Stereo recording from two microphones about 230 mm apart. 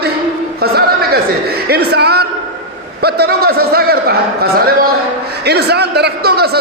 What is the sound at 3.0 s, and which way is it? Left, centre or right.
A man's voice, right.